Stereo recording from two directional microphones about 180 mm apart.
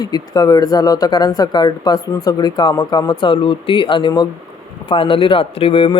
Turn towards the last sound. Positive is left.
turn(degrees=30)  # may be behind; listen again after turning